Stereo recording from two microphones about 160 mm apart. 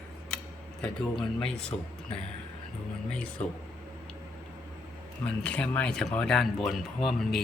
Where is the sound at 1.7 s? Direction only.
30° left (ahead or behind).